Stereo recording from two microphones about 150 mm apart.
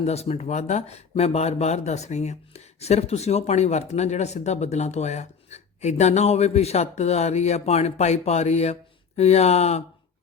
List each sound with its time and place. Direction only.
0.0 s speech: 45° left (ahead or behind)